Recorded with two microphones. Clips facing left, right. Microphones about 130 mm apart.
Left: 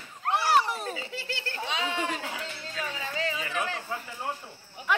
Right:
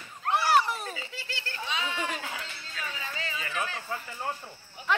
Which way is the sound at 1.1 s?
60° left (ahead or behind).